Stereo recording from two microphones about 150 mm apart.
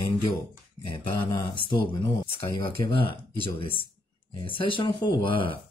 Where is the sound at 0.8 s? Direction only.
35° left (ahead or behind).